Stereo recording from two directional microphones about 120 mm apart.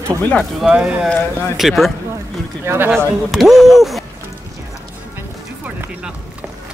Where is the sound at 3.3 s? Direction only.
Centre (ahead or behind).